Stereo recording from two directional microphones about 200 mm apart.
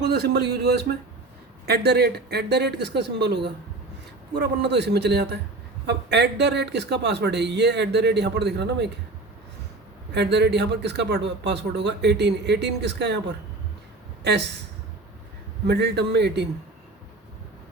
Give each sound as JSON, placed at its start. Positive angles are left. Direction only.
{"t": 0.0, "sound": "speech", "side_deg": -55}
{"t": 10.2, "sound": "speech", "side_deg": -55}
{"t": 15.6, "sound": "speech", "side_deg": -55}